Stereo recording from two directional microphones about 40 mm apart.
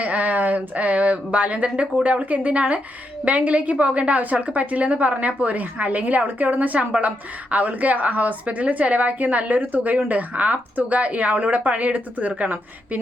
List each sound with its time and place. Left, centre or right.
0.0 s a woman's voice: right